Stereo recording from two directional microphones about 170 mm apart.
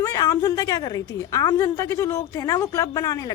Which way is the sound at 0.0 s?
20° left (ahead or behind).